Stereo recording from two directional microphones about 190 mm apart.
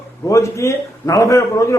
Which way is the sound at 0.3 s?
15° left (ahead or behind).